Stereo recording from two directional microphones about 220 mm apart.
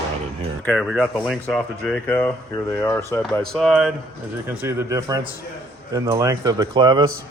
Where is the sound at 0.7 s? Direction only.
Centre (ahead or behind).